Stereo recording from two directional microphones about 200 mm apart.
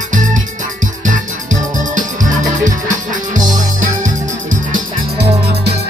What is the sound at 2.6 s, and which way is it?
Music, 40° right (ahead or behind).